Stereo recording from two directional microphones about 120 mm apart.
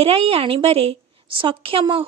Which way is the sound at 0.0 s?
55° right (ahead or behind).